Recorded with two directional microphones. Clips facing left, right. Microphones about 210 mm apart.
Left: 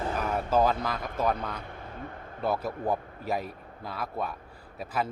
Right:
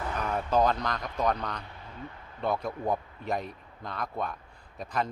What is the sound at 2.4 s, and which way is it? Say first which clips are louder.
A man's voice: left 1 dB; 5° left (ahead or behind).